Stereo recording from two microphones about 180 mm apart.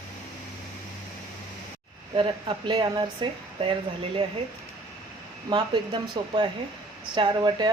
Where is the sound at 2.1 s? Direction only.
30° right (ahead or behind).